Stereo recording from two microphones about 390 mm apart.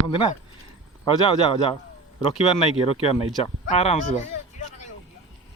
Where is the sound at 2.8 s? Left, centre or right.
Centre.